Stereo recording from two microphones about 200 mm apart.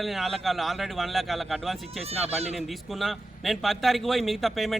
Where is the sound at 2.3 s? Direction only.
30° right (ahead or behind).